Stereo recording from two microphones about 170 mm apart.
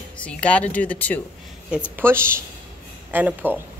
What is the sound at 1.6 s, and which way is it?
Speech, 5° right (ahead or behind).